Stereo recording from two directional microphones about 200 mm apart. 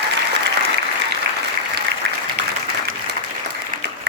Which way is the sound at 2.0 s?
60° right (ahead or behind).